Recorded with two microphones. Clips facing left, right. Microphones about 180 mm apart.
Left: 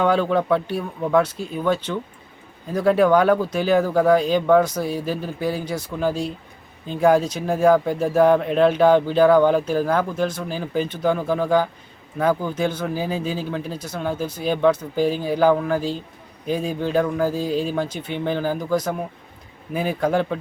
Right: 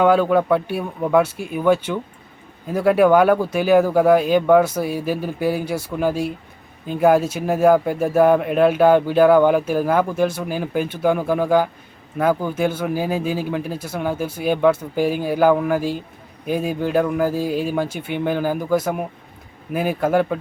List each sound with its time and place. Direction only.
0.0 s speech: 5° right (ahead or behind)